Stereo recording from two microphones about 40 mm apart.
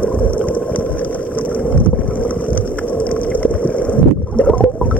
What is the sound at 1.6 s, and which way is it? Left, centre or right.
Boat, left.